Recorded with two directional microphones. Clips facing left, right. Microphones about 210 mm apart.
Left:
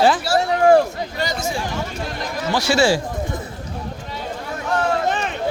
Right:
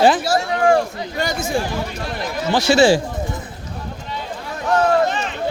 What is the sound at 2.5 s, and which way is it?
Speech, 20° right (ahead or behind).